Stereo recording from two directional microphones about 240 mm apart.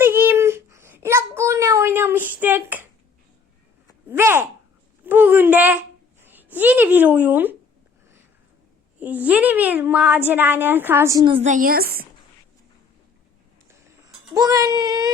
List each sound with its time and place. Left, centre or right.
0.0 s child singing: centre
4.1 s a sound: centre
9.0 s a woman's voice: centre; by 12.0 s right
14.3 s a woman's voice: centre